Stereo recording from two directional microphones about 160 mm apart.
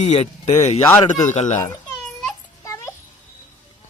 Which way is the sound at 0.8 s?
15° left (ahead or behind).